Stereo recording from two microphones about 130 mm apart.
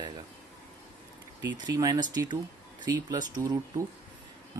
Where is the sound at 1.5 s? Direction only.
30° right (ahead or behind).